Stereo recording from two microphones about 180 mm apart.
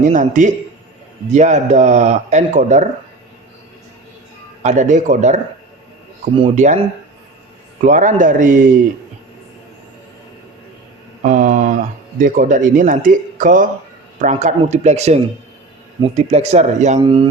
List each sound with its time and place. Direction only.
0.0 s speech: 45° right (ahead or behind)
4.6 s speech: 40° right (ahead or behind)
7.9 s speech: 45° right (ahead or behind)
11.2 s mantra: 45° right (ahead or behind)
12.2 s speech: 45° right (ahead or behind)
17.0 s a man's voice: 30° right (ahead or behind)